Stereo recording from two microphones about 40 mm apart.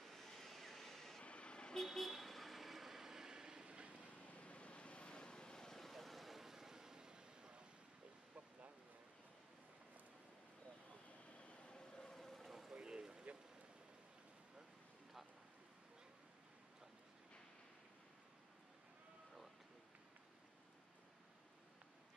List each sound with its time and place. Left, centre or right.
0.1 s vehicle: centre
1.2 s vehicle: left
1.8 s vehicle: centre; by 4.1 s right
4.3 s vehicle: left
5.8 s vehicle: centre; by 7.6 s right
11.3 s vehicle: left
12.0 s vehicle: centre
12.7 s a sound: right